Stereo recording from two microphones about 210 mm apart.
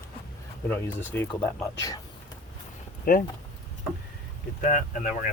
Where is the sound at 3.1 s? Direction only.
45° left (ahead or behind).